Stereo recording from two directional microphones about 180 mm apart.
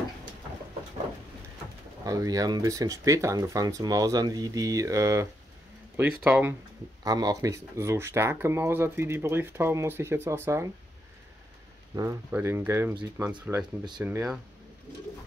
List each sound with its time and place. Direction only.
2.0 s speech: 20° right (ahead or behind)
7.0 s speech: 20° right (ahead or behind)
11.9 s speech: 20° right (ahead or behind)